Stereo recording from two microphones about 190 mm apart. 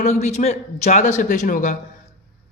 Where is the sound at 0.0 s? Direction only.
35° left (ahead or behind).